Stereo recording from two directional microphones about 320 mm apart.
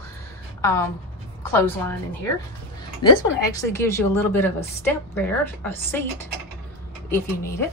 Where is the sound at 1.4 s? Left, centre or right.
Centre.